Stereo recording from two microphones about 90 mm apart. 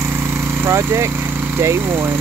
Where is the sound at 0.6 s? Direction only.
30° right (ahead or behind).